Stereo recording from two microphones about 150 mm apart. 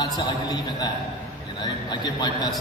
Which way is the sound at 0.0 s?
30° left (ahead or behind).